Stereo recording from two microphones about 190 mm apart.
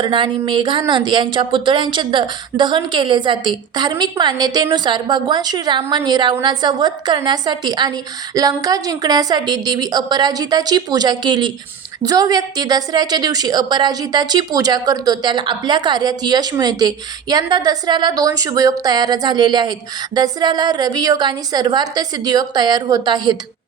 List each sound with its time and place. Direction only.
0.0 s speech: 25° right (ahead or behind)